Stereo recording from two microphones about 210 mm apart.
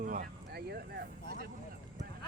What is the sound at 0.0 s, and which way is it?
Speech, 40° right (ahead or behind).